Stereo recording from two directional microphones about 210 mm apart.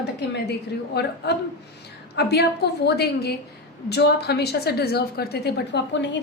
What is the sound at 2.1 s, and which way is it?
A woman's voice, 50° left (ahead or behind).